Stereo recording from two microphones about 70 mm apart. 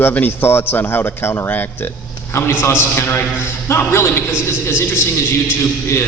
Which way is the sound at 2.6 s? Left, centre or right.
Left.